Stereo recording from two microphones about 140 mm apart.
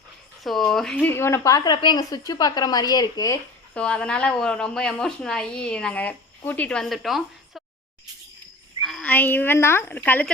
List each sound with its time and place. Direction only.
0.4 s speech: centre (ahead or behind); by 3.3 s 25° left (ahead or behind)
3.8 s a woman's voice: 5° left (ahead or behind)
8.8 s a sound: centre (ahead or behind)
9.0 s a woman's voice: 15° left (ahead or behind)